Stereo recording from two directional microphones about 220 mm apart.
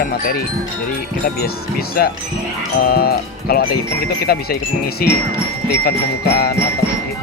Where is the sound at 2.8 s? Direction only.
45° left (ahead or behind).